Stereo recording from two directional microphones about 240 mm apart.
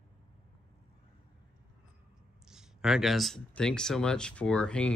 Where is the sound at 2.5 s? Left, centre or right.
Centre.